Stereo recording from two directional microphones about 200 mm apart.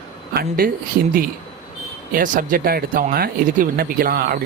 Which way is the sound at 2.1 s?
45° right (ahead or behind).